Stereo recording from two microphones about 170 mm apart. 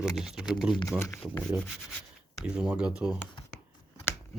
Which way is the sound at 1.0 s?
15° left (ahead or behind).